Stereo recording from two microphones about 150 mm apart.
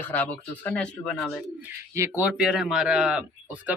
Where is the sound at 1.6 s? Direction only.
15° right (ahead or behind).